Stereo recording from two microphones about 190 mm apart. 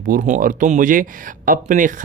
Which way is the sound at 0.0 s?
45° right (ahead or behind).